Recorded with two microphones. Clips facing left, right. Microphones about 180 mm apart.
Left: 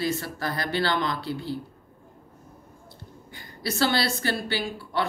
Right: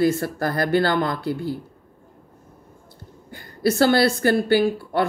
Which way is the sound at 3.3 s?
50° right (ahead or behind).